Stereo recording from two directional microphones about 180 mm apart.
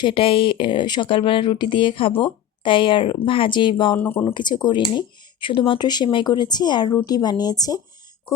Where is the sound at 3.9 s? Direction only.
10° left (ahead or behind).